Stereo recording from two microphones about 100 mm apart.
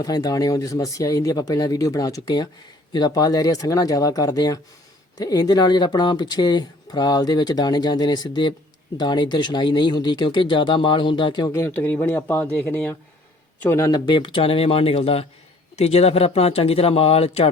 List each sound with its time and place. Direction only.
0.0 s speech: 40° left (ahead or behind)
11.5 s speech: 20° left (ahead or behind)
13.9 s speech: 50° left (ahead or behind); by 15.3 s 80° left
15.7 s speech: 90° left